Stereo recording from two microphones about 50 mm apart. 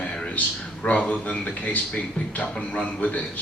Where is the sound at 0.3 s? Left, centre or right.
Left.